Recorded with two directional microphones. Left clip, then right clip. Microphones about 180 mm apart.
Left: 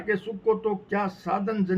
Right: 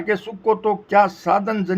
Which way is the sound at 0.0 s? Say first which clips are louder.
Right 5 dB; 20° right (ahead or behind).